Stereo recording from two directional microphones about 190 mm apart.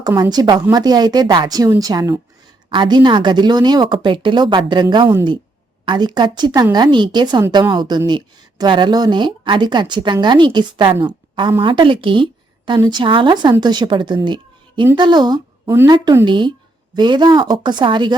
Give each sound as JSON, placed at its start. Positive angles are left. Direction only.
{"t": 0.0, "sound": "a woman's voice", "side_deg": -20}
{"t": 14.3, "sound": "a sound", "side_deg": -25}
{"t": 14.9, "sound": "speech", "side_deg": -25}